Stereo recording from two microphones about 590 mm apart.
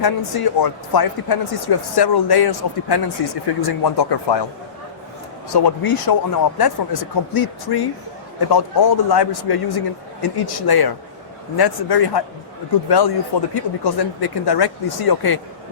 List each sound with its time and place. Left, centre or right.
0.0 s speech: left
5.5 s speech: left
13.5 s speech: left